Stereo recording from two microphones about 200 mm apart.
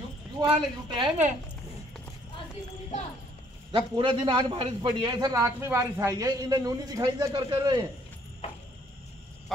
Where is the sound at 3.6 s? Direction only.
25° right (ahead or behind).